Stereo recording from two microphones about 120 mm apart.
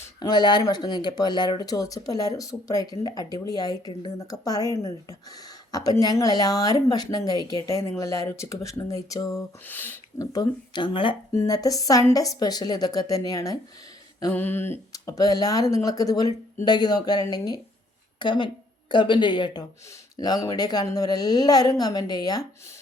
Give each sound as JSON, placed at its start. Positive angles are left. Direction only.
{"t": 0.2, "sound": "speech", "side_deg": 35}
{"t": 9.6, "sound": "speech", "side_deg": 15}
{"t": 10.2, "sound": "speech", "side_deg": 30}
{"t": 11.3, "sound": "speech", "side_deg": 30}
{"t": 14.3, "sound": "a sound", "side_deg": 20}
{"t": 14.9, "sound": "a woman's voice", "side_deg": 30}